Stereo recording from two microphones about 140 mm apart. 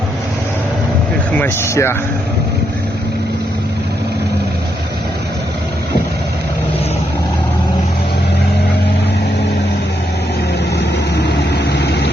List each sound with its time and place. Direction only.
1.4 s speech: 20° left (ahead or behind)